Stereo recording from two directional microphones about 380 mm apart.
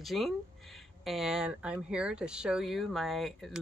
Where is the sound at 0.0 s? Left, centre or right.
Centre.